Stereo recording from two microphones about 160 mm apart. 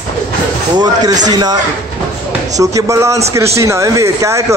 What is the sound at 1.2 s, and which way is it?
Speech, 25° right (ahead or behind).